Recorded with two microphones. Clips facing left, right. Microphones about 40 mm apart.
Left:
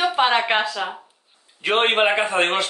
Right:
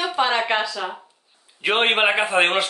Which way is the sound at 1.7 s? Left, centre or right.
Centre.